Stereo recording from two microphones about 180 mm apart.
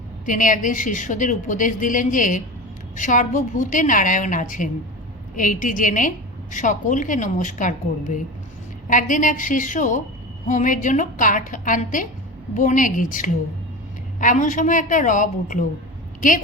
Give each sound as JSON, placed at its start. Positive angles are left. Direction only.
{"t": 0.3, "sound": "a woman's voice", "side_deg": 45}